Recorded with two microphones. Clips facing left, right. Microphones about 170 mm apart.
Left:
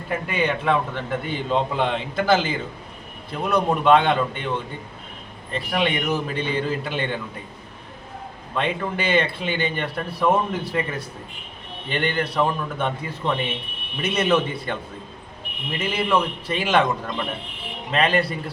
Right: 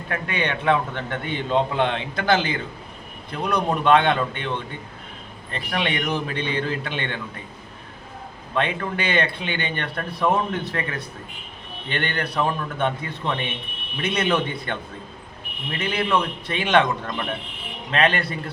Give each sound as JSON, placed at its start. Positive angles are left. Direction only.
{"t": 0.1, "sound": "a man's voice", "side_deg": 5}
{"t": 8.5, "sound": "a man's voice", "side_deg": 5}